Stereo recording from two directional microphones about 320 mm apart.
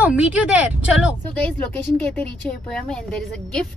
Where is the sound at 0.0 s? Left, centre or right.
Centre.